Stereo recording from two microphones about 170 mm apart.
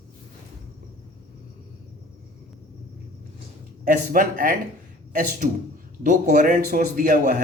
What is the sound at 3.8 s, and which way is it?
Speech, 55° right (ahead or behind).